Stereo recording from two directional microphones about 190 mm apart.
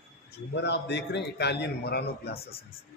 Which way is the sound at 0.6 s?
65° left (ahead or behind).